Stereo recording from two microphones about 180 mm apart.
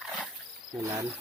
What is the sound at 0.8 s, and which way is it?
Speech, 15° right (ahead or behind).